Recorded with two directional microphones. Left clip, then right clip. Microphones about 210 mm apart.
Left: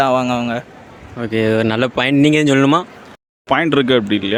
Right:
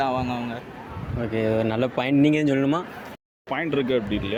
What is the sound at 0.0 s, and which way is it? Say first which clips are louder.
Speech: left 10 dB; 50° left (ahead or behind).